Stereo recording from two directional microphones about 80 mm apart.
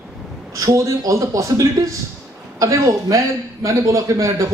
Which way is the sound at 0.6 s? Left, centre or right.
Right.